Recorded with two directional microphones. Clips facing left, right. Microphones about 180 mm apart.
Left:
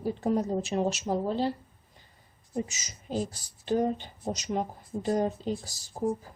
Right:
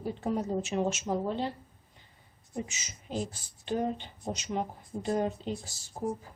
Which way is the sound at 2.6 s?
40° left (ahead or behind).